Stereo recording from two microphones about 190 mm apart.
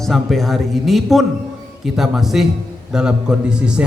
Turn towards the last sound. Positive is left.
turn(degrees=-5)  # may be behind; listen again after turning